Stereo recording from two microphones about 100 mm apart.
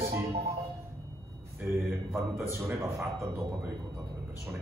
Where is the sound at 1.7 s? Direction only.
25° right (ahead or behind).